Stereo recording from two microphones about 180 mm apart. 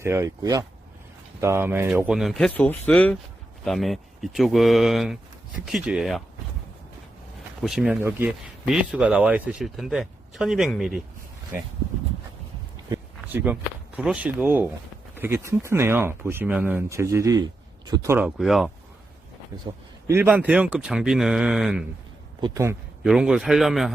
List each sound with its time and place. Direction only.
0.0 s speech: 15° right (ahead or behind)
7.6 s speech: 5° right (ahead or behind)
12.9 s speech: 10° right (ahead or behind)
19.7 s a man's voice: 25° right (ahead or behind)
20.1 s speech: 10° right (ahead or behind)
22.4 s speech: 20° right (ahead or behind)
23.0 s speech: 5° right (ahead or behind)